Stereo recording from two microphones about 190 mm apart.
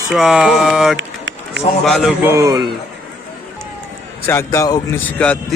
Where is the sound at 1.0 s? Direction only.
80° right.